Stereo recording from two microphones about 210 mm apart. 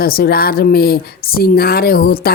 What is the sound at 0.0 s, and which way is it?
Speech, 45° left (ahead or behind).